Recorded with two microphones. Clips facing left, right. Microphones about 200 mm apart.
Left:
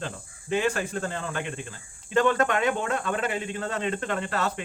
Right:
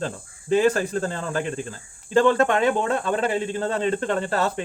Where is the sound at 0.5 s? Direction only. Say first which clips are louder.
Right 7 dB; 35° right (ahead or behind).